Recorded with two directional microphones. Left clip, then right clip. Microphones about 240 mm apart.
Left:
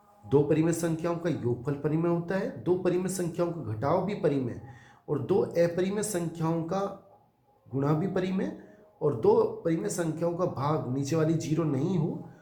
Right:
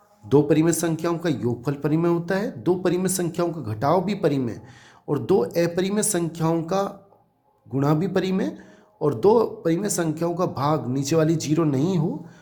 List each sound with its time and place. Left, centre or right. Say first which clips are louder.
0.3 s speech: right 6 dB; right